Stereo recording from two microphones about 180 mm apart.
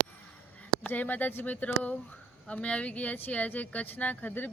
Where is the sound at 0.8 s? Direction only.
10° left (ahead or behind).